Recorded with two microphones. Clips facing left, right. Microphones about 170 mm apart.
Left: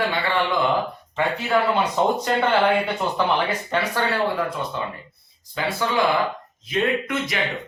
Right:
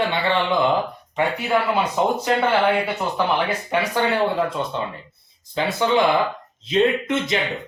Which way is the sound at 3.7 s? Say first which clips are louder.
Right 2 dB; 15° right (ahead or behind).